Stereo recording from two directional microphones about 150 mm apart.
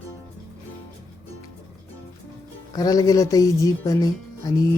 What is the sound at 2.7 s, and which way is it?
Speech, 25° left (ahead or behind).